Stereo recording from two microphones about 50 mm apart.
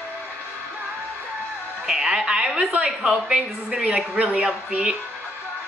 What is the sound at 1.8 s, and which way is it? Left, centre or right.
A woman's voice, centre.